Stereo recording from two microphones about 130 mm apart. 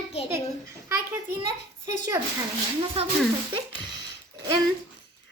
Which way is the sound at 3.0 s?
50° right (ahead or behind).